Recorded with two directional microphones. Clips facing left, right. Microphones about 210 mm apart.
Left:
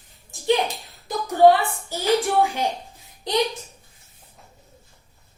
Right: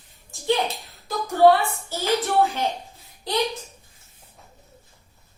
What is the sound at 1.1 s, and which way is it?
A woman's voice, 15° left (ahead or behind).